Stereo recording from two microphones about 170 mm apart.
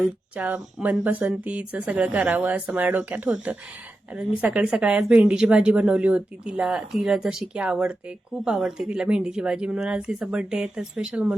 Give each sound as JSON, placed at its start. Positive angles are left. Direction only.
{"t": 0.0, "sound": "a woman's voice", "side_deg": -10}